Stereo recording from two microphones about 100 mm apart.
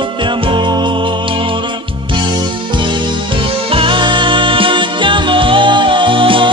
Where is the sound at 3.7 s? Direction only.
65° right (ahead or behind).